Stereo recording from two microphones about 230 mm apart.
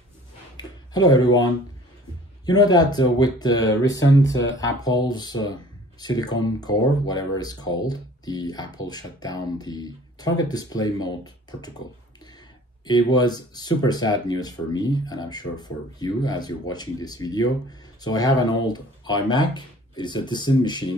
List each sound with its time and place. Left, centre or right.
0.6 s a sound: centre
2.4 s speech: centre
12.8 s speech: centre